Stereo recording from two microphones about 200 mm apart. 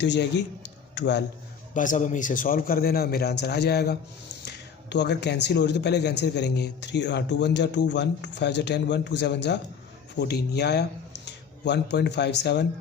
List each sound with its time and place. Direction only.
0.0 s a man's voice: 60° left (ahead or behind)
1.7 s a man's voice: 40° left (ahead or behind); by 12.6 s 60° left (ahead or behind)